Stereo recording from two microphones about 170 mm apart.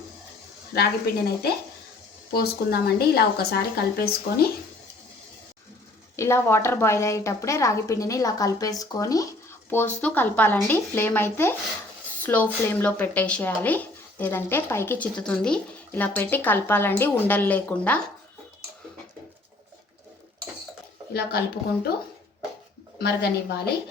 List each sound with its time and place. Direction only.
0.7 s a woman's voice: 70° left (ahead or behind)
6.1 s speech: 15° left (ahead or behind)
21.1 s a woman's voice: 70° left (ahead or behind)
23.0 s a woman's voice: 70° left (ahead or behind)